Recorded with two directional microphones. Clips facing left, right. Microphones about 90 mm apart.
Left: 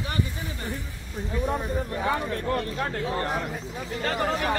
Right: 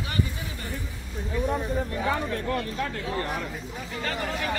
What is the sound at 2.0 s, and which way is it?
Speech, 30° left (ahead or behind).